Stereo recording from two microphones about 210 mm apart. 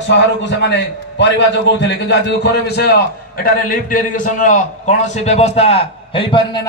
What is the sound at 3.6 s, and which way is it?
A man's voice, 40° left (ahead or behind).